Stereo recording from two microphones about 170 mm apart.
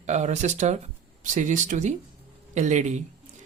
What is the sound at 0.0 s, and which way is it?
Speech, 45° right (ahead or behind).